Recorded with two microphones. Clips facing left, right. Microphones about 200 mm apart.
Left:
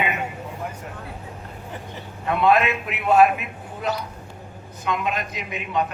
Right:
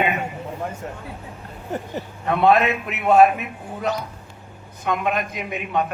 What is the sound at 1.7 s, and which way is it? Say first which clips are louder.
A man's voice: right 10 dB; 45° right (ahead or behind).